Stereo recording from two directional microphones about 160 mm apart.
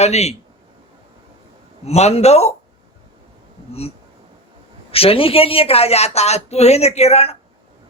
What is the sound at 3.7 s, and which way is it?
Speech, 40° left (ahead or behind).